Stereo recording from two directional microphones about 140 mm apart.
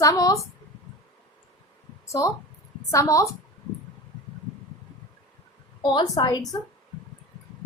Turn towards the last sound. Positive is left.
turn(degrees=30)  # may be behind; listen again after turning